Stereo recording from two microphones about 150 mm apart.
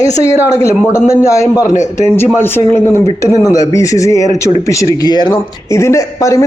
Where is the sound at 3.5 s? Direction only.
20° left (ahead or behind).